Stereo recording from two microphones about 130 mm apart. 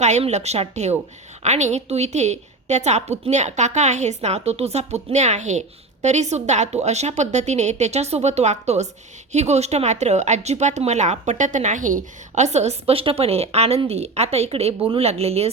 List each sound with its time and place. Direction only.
0.0 s a woman's voice: 60° right (ahead or behind)
12.9 s a woman's voice: 45° right (ahead or behind)